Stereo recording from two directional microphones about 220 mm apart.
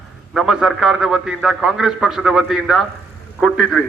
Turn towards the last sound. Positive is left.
turn(degrees=-5)  # may be behind; listen again after turning